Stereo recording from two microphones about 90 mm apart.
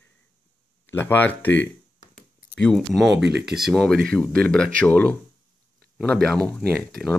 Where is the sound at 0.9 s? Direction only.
20° left (ahead or behind).